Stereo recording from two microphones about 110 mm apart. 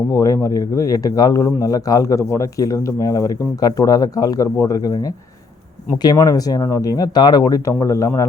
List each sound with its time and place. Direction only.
0.1 s speech: 30° left (ahead or behind)
6.1 s speech: 35° left (ahead or behind)